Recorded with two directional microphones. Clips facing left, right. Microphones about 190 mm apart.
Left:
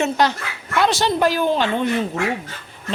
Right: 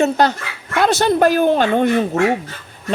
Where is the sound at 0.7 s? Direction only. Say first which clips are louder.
Right 4 dB; 45° right (ahead or behind).